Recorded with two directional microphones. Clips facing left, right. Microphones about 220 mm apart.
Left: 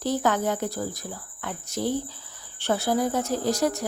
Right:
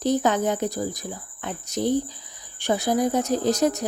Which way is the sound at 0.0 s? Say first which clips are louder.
Right 3 dB; 20° right (ahead or behind).